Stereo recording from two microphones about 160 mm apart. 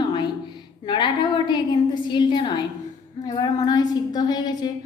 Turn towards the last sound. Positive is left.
turn(degrees=25)  # may be behind; listen again after turning